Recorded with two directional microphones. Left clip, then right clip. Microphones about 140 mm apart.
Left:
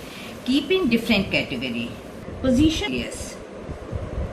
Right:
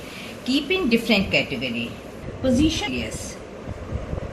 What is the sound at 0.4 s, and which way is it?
A woman's voice, 60° right (ahead or behind).